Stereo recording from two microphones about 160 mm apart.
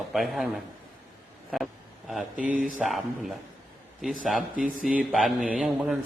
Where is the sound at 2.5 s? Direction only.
55° right (ahead or behind).